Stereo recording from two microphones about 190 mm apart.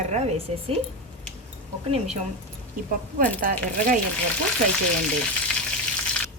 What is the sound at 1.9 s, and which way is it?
Speech, 35° right (ahead or behind).